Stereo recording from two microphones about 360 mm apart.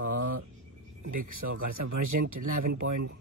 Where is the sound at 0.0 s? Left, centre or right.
Right.